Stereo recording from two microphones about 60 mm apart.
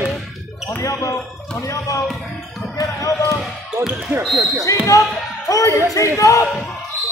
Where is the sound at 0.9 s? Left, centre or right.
Left.